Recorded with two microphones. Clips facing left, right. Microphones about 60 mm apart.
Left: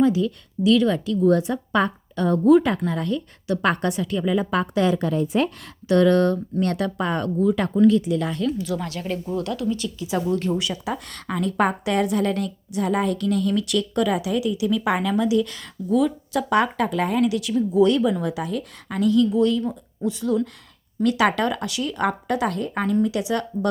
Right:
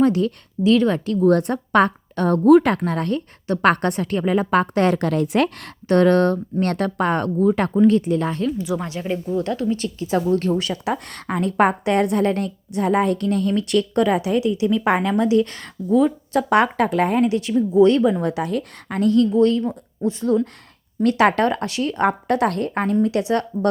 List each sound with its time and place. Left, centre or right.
0.0 s speech: right
0.6 s a woman's voice: right
5.9 s a woman's voice: right
8.4 s speech: right
9.4 s a woman's voice: right
15.9 s a woman's voice: right
22.3 s a woman's voice: right